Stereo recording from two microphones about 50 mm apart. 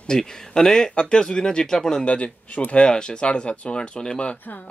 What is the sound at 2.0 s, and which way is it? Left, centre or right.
Speech, left.